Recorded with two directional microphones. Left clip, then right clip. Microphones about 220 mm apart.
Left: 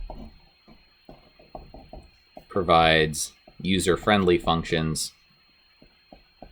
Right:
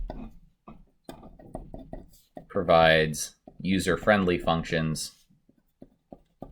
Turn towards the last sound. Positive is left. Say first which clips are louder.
# left 3 dB
turn(degrees=40)  # may be behind; listen again after turning